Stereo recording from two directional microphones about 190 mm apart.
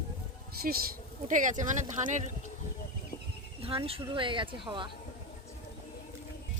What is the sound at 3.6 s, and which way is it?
Speech, 30° right (ahead or behind).